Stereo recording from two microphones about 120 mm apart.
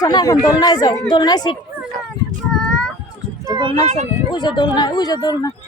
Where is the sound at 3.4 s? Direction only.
40° right (ahead or behind).